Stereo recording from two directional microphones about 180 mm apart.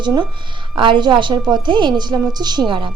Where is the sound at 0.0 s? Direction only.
25° right (ahead or behind).